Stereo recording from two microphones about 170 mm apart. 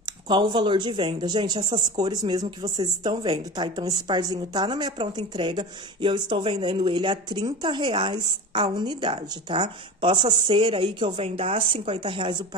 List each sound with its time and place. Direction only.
0.0 s speech: 25° right (ahead or behind)